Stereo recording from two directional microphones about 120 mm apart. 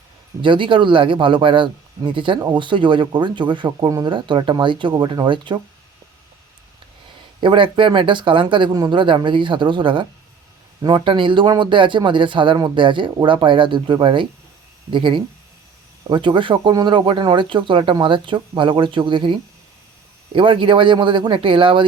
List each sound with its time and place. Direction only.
0.4 s speech: 45° right (ahead or behind)
7.4 s speech: 45° right (ahead or behind)